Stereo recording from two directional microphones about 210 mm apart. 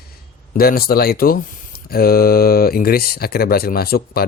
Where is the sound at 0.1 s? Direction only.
45° left (ahead or behind).